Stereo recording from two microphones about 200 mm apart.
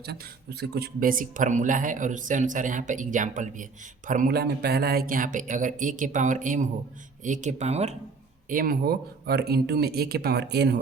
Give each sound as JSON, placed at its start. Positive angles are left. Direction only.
{"t": 0.6, "sound": "speech", "side_deg": -50}
{"t": 8.4, "sound": "a man's voice", "side_deg": -45}